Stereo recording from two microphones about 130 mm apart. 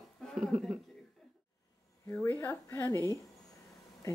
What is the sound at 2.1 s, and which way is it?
Speech, 15° left (ahead or behind).